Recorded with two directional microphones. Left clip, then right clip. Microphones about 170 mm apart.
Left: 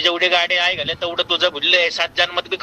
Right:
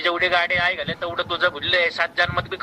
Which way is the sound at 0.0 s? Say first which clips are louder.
Left 3 dB; 30° left (ahead or behind).